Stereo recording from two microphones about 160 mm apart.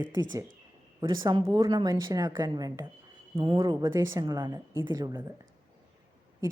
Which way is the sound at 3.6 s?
20° right (ahead or behind).